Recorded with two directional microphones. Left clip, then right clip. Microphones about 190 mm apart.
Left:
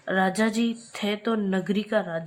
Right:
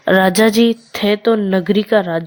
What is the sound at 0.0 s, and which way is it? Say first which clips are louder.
Speech: right 12 dB; 50° right (ahead or behind).